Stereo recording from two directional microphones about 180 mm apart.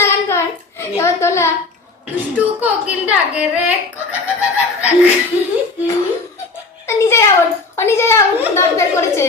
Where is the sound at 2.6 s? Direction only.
10° right (ahead or behind).